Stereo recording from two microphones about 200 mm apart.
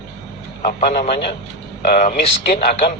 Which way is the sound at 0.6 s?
40° left (ahead or behind).